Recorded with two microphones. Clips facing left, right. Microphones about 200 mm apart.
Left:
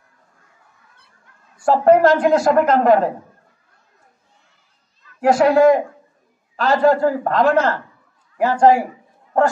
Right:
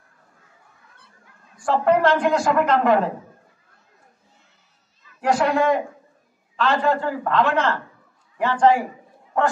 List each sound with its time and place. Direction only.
1.7 s a woman's voice: 40° left (ahead or behind)
5.2 s a woman's voice: 40° left (ahead or behind)